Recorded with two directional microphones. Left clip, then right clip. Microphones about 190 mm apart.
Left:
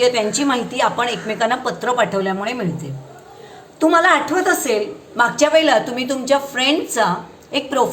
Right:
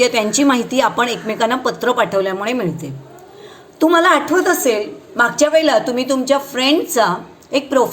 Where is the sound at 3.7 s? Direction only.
25° right (ahead or behind).